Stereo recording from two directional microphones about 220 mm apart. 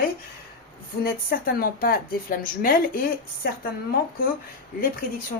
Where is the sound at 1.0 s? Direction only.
40° left (ahead or behind).